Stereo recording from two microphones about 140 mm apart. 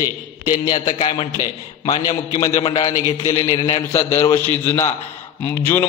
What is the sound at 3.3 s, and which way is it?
Speech, 45° left (ahead or behind).